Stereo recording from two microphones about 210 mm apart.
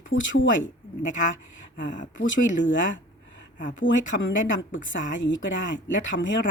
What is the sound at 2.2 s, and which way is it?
Speech, 60° left (ahead or behind).